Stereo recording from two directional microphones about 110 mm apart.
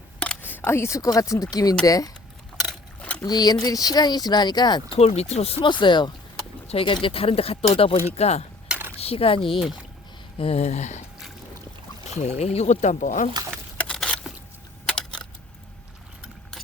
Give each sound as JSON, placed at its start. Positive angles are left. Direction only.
{"t": 0.2, "sound": "speech", "side_deg": 15}
{"t": 3.0, "sound": "a sound", "side_deg": 15}
{"t": 3.2, "sound": "speech", "side_deg": 35}
{"t": 4.9, "sound": "speech", "side_deg": 75}
{"t": 5.6, "sound": "speech", "side_deg": 45}
{"t": 8.1, "sound": "speech", "side_deg": 75}
{"t": 8.6, "sound": "a sound", "side_deg": -10}
{"t": 9.0, "sound": "speech", "side_deg": 60}
{"t": 12.1, "sound": "speech", "side_deg": 80}
{"t": 13.5, "sound": "a sound", "side_deg": 10}